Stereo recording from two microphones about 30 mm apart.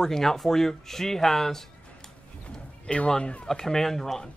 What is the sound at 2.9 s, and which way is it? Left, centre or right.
Speech, left.